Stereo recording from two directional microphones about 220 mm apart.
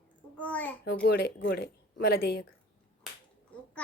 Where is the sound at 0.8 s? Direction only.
50° left (ahead or behind).